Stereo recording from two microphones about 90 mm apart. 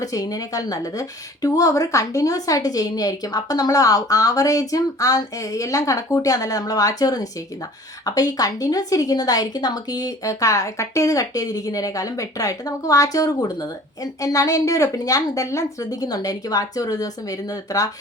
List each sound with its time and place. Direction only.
0.0 s a woman's voice: 40° left (ahead or behind)